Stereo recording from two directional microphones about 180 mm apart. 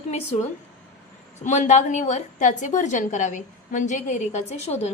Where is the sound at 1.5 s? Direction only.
40° left (ahead or behind).